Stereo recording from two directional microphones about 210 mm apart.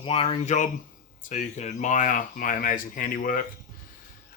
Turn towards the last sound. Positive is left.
turn(degrees=40)  # may be behind; listen again after turning